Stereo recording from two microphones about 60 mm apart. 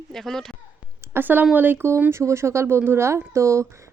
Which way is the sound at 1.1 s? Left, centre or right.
Right.